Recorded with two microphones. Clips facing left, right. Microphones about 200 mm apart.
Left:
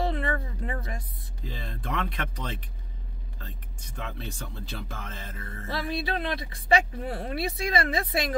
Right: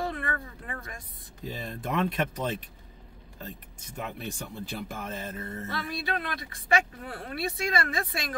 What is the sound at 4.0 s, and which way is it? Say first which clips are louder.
Speech: right 2 dB; 15° right (ahead or behind).